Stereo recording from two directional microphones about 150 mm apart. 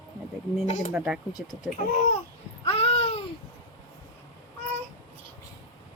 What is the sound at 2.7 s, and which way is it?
Babbling, 40° left (ahead or behind).